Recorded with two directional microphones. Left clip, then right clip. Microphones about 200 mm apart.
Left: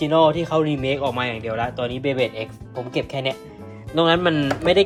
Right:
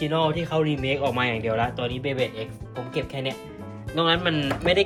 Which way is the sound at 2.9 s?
30° left (ahead or behind).